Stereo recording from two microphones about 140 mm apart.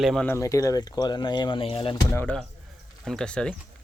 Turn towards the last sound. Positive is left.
turn(degrees=5)  # may be behind; listen again after turning